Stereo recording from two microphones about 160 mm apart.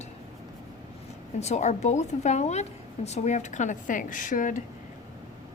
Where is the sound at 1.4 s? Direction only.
45° left (ahead or behind).